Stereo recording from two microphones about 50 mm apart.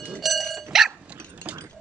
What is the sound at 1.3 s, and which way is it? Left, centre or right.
Mechanisms, right.